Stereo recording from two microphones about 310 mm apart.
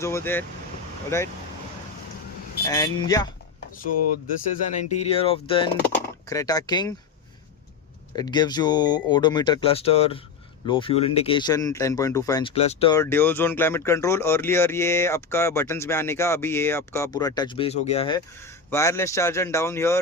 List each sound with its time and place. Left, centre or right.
0.0 s speech: centre
2.6 s speech: centre
4.7 s speech: left
8.1 s speech: centre